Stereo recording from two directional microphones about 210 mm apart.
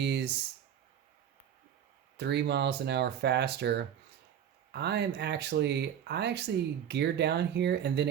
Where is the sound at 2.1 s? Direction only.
55° right (ahead or behind).